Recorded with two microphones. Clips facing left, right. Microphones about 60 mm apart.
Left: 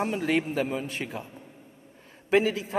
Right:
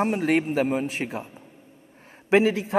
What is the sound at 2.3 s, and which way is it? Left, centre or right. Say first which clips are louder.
Speech: right 4 dB; right.